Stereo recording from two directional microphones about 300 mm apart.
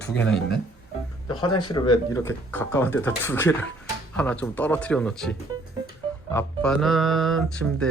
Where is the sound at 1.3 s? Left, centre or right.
Centre.